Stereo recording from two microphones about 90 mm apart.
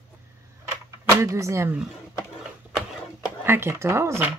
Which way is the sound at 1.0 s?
35° right (ahead or behind).